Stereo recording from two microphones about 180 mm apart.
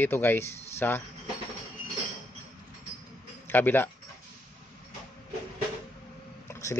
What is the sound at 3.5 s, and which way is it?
Speech, 10° left (ahead or behind).